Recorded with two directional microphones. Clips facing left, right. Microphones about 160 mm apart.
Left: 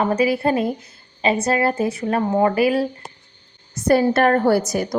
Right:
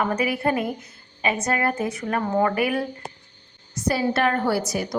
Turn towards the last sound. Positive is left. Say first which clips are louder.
# left 6 dB
turn(degrees=45)  # may be behind; listen again after turning